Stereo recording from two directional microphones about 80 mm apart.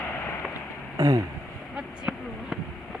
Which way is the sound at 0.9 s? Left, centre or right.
Right.